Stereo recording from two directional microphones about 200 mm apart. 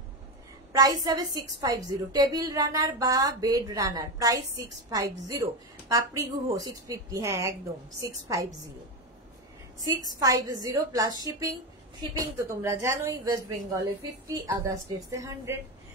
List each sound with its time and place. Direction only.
0.7 s a woman's voice: 20° right (ahead or behind)
9.8 s a woman's voice: 20° right (ahead or behind)